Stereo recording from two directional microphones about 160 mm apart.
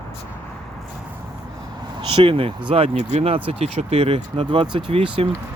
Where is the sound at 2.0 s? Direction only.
30° right (ahead or behind).